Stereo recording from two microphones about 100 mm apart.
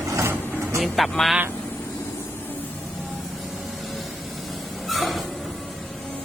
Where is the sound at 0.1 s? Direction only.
30° right (ahead or behind).